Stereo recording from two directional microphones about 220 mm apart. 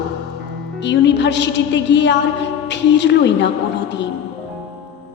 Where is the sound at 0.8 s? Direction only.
50° left (ahead or behind).